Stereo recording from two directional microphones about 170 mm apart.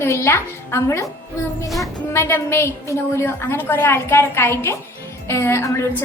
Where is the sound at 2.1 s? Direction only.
15° left (ahead or behind).